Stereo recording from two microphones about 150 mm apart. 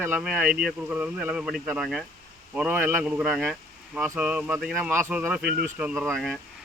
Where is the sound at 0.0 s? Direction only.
10° right (ahead or behind).